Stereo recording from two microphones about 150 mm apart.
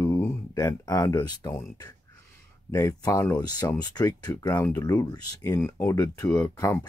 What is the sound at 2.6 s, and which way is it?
Speech, 20° left (ahead or behind).